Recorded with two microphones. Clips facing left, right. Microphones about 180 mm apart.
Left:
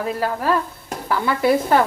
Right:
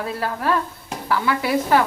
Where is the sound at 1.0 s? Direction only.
25° left (ahead or behind).